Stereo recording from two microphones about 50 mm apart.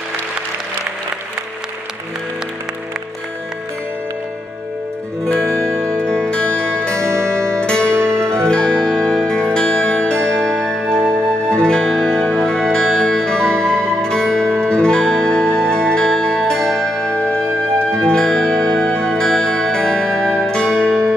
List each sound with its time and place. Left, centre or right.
5.8 s music: centre
7.0 s music: right
7.6 s music: centre
7.9 s music: right
8.3 s music: centre
17.1 s music: left
17.9 s music: centre